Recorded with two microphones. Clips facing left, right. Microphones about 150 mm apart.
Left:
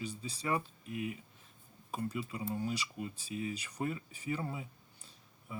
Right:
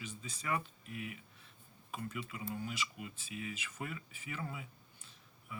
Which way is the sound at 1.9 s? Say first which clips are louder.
Left 5 dB; 35° left (ahead or behind).